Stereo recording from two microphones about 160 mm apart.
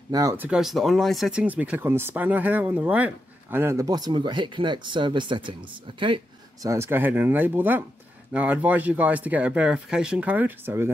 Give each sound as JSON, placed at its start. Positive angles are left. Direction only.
{"t": 0.1, "sound": "speech", "side_deg": -20}
{"t": 0.5, "sound": "speech", "side_deg": 0}
{"t": 6.7, "sound": "speech", "side_deg": -15}